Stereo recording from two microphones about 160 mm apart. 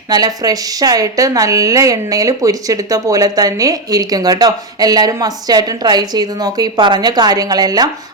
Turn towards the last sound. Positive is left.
turn(degrees=-25)  # may be behind; listen again after turning